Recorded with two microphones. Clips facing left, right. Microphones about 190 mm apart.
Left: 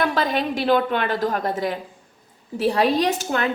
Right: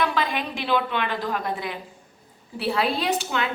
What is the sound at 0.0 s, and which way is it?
A woman's voice, 45° left (ahead or behind).